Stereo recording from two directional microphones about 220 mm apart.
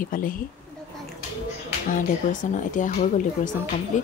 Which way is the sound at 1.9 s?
35° left (ahead or behind).